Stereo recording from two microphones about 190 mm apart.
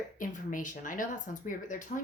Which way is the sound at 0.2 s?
45° left (ahead or behind).